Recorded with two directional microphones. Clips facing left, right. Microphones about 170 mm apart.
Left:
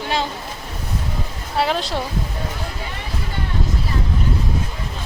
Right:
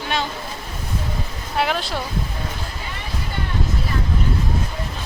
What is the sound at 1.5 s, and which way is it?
Speech, 30° left (ahead or behind).